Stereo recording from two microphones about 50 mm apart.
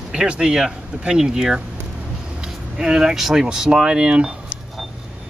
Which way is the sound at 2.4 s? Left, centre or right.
Centre.